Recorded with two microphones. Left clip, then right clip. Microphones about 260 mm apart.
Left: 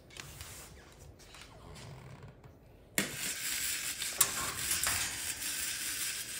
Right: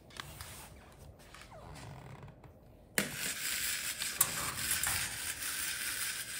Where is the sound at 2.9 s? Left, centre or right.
Centre.